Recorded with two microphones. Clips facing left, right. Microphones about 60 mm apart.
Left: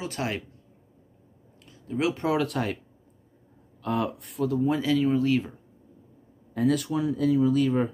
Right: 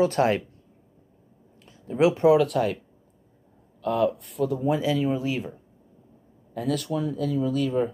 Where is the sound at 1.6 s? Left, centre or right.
Right.